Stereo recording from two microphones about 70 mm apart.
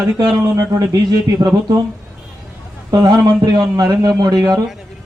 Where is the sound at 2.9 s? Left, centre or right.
Right.